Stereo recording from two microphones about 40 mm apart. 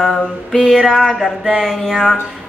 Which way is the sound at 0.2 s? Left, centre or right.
Centre.